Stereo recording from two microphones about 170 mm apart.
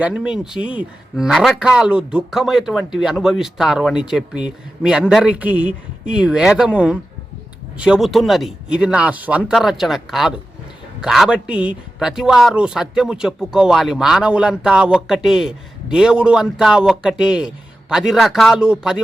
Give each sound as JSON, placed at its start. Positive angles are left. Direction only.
{"t": 0.0, "sound": "a man's voice", "side_deg": -5}